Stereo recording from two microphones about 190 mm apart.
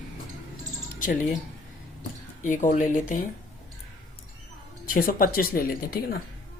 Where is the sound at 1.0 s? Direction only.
45° left (ahead or behind).